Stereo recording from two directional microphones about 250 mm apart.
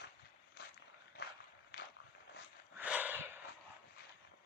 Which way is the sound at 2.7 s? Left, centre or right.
Centre.